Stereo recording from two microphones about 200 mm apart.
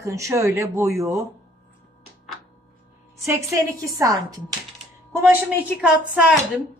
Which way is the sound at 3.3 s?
15° right (ahead or behind).